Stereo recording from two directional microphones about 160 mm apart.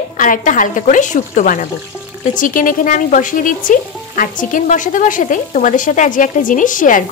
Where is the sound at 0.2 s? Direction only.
55° left (ahead or behind).